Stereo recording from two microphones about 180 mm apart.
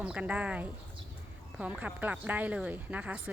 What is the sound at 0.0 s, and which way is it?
Speech, 5° right (ahead or behind).